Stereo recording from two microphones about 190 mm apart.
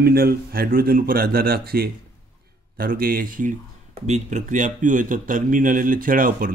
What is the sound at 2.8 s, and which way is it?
Speech, 50° right (ahead or behind).